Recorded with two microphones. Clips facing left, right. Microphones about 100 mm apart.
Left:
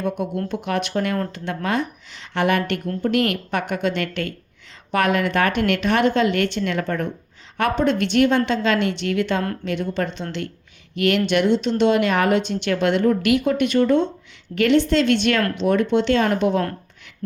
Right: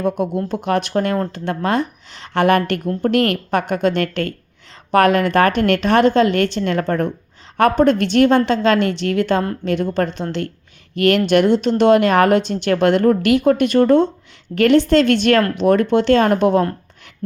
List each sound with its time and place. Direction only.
0.4 s speech: 35° right (ahead or behind)